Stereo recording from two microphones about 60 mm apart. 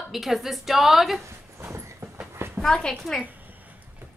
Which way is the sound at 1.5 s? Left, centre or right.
Right.